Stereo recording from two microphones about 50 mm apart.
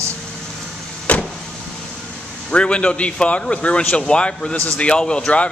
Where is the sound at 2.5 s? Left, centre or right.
Left.